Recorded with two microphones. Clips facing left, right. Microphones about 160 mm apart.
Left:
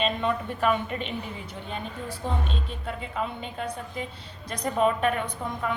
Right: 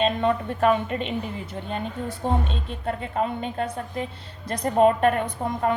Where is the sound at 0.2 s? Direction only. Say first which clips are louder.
Right 5 dB; 40° right (ahead or behind).